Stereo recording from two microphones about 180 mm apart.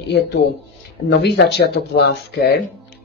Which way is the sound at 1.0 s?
70° left (ahead or behind).